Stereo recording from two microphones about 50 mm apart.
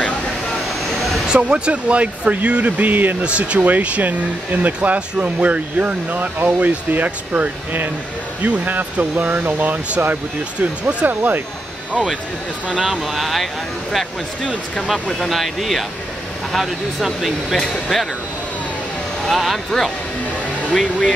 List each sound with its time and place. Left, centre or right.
1.2 s speech: centre; by 3.2 s right
3.2 s speech: right
10.6 s speech: right
11.1 s speech: right
12.6 s speech: centre
14.9 s speech: centre
19.3 s speech: centre